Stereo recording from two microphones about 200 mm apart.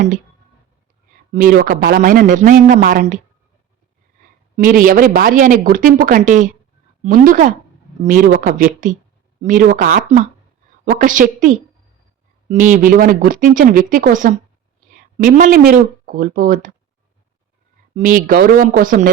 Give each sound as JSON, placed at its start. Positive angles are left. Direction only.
{"t": 1.3, "sound": "speech", "side_deg": -45}
{"t": 4.5, "sound": "speech", "side_deg": -45}
{"t": 17.9, "sound": "speech", "side_deg": -45}